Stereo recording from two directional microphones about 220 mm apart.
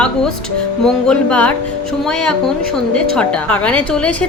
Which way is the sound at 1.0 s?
5° left (ahead or behind).